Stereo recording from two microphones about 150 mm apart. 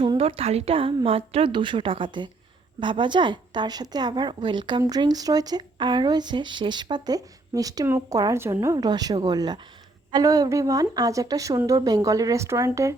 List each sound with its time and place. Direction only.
0.0 s speech: 35° right (ahead or behind); by 13.0 s 20° right (ahead or behind)